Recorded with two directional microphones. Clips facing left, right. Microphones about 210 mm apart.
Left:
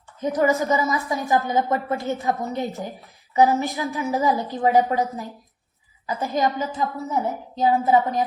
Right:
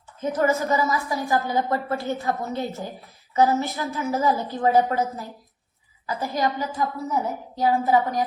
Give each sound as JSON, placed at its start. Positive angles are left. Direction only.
{"t": 0.2, "sound": "a woman's voice", "side_deg": 15}